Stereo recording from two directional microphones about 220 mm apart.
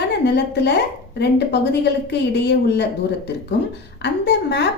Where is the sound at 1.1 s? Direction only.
50° left (ahead or behind).